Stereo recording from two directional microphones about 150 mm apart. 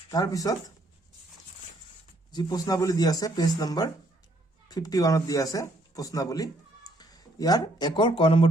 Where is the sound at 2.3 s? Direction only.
25° left (ahead or behind).